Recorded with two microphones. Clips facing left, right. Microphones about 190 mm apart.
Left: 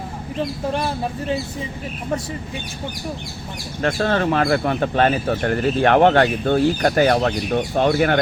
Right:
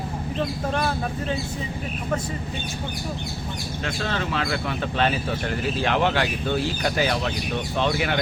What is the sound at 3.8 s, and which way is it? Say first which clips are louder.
Speech: left 9 dB; 50° left (ahead or behind).